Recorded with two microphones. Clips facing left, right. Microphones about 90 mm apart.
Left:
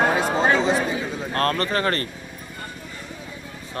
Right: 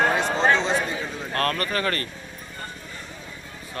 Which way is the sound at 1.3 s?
35° left (ahead or behind).